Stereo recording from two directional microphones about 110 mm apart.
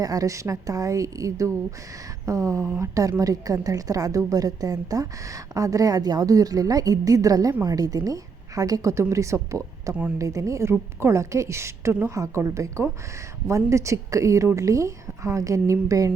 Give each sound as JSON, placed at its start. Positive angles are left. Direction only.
{"t": 0.0, "sound": "a woman's voice", "side_deg": -35}